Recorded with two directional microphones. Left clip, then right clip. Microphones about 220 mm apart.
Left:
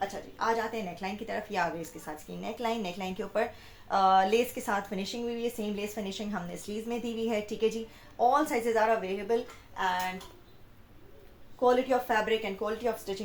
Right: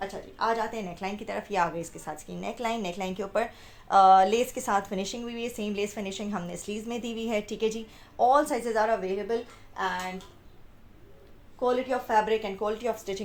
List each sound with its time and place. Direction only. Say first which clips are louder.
0.0 s a woman's voice: right 2 dB; 35° right (ahead or behind)
11.6 s a woman's voice: left 2 dB; 35° right (ahead or behind)